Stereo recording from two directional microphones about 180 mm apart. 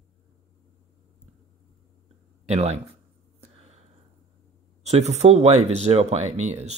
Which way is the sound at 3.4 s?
35° right (ahead or behind).